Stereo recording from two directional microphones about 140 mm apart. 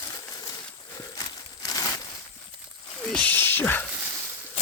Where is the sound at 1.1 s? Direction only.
25° left (ahead or behind).